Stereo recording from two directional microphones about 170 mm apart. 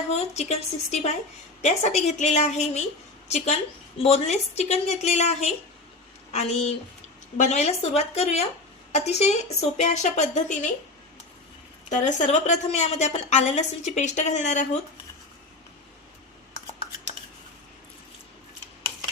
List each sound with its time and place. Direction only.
0.1 s a woman's voice: 40° left (ahead or behind)
11.9 s a woman's voice: 45° left (ahead or behind)